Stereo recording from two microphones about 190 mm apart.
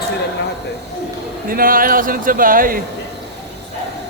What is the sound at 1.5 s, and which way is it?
A man's voice, 50° right (ahead or behind).